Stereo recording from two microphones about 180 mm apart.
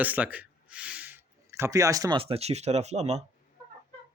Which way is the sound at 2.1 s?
30° right (ahead or behind).